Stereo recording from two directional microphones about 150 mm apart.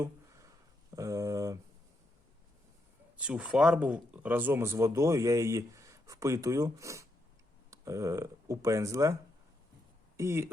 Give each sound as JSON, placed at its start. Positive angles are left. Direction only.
{"t": 0.9, "sound": "speech", "side_deg": -20}
{"t": 3.2, "sound": "speech", "side_deg": -5}
{"t": 10.2, "sound": "speech", "side_deg": -15}